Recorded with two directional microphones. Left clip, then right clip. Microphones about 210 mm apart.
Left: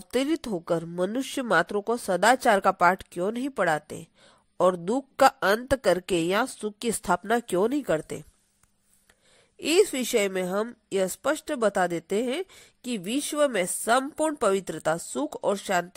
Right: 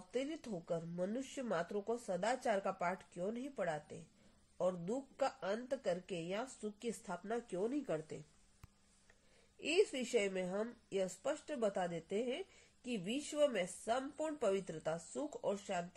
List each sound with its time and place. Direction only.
0.1 s speech: 45° left (ahead or behind)
9.6 s a woman's voice: 35° left (ahead or behind)